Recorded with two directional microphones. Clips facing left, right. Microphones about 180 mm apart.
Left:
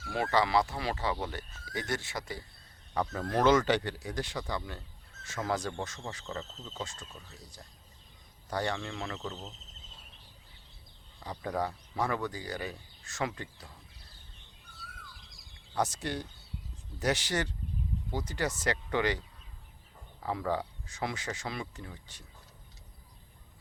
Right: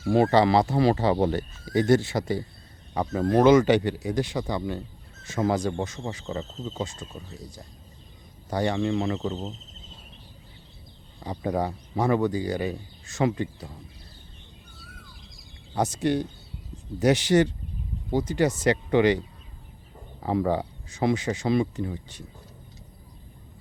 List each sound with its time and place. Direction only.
0.0 s speech: 30° right (ahead or behind)
2.9 s speech: 15° right (ahead or behind)
11.2 s speech: 20° right (ahead or behind)
14.8 s bird: 20° right (ahead or behind)
15.7 s speech: 20° right (ahead or behind)